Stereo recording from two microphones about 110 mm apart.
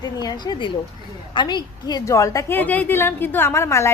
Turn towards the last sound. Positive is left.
turn(degrees=25)  # may be behind; listen again after turning